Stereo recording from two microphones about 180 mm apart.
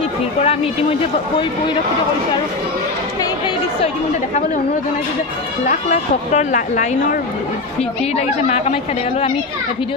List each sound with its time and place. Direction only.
0.4 s speech: 35° left (ahead or behind)
5.7 s speech: 45° left (ahead or behind)
8.2 s a woman's voice: 40° left (ahead or behind)